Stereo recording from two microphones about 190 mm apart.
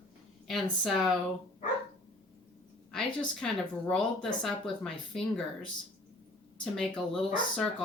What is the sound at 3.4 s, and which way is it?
Speech, 5° left (ahead or behind).